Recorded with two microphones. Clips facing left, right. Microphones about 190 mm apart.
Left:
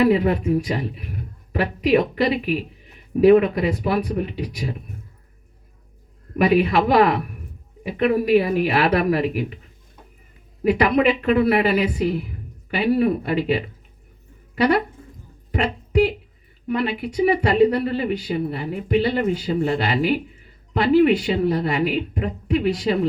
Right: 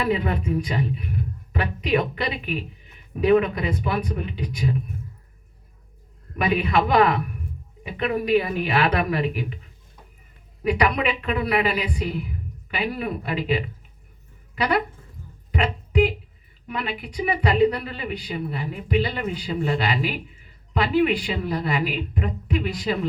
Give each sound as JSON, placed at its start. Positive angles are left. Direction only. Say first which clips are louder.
{"t": 0.0, "sound": "a woman's voice", "louder": "left 7 dB", "side_deg": 40}
{"t": 6.3, "sound": "a woman's voice", "louder": "left 5 dB", "side_deg": 40}
{"t": 10.6, "sound": "a woman's voice", "louder": "left 5 dB", "side_deg": 40}
{"t": 15.5, "sound": "a sound", "louder": "left 2 dB", "side_deg": 40}
{"t": 16.6, "sound": "a woman's voice", "louder": "left 7 dB", "side_deg": 40}